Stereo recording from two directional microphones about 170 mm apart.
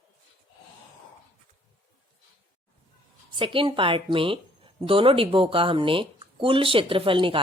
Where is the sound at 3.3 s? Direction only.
30° right (ahead or behind).